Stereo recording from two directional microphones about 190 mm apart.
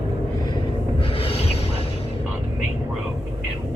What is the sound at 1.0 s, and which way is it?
Music, 30° left (ahead or behind).